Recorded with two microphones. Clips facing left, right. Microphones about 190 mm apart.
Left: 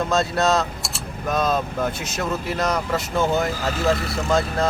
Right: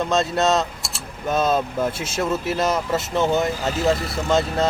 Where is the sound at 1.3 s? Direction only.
25° right (ahead or behind).